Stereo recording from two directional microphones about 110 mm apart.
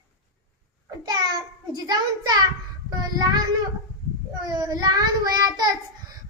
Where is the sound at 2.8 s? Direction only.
40° right (ahead or behind).